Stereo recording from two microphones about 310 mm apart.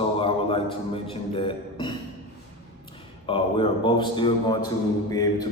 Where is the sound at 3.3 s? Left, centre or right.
Centre.